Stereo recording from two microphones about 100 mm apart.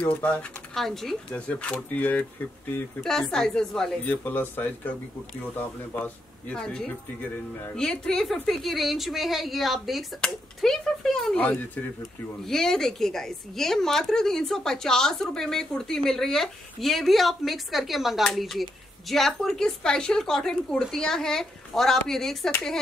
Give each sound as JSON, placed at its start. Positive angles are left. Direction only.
{"t": 0.0, "sound": "a woman's voice", "side_deg": 15}
{"t": 4.0, "sound": "a woman's voice", "side_deg": 15}
{"t": 11.3, "sound": "speech", "side_deg": 15}
{"t": 12.4, "sound": "a woman's voice", "side_deg": 5}